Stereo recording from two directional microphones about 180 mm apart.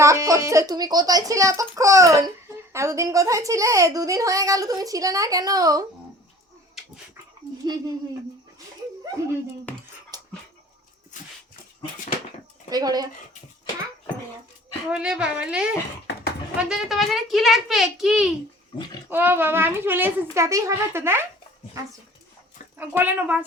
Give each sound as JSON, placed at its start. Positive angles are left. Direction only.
{"t": 0.0, "sound": "a woman's voice", "side_deg": -15}
{"t": 9.2, "sound": "speech", "side_deg": -15}
{"t": 9.7, "sound": "a sound", "side_deg": 10}
{"t": 10.1, "sound": "dog", "side_deg": -20}
{"t": 12.7, "sound": "a woman's voice", "side_deg": -20}
{"t": 14.8, "sound": "a child's voice", "side_deg": -5}
{"t": 22.8, "sound": "speech", "side_deg": -10}